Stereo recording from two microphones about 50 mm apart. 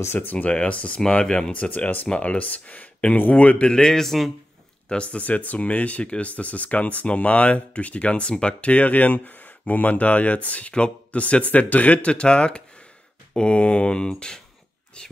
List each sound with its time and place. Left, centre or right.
0.3 s a man's voice: left; by 1.5 s centre
1.5 s speech: left
3.7 s a man's voice: centre
4.8 s speech: left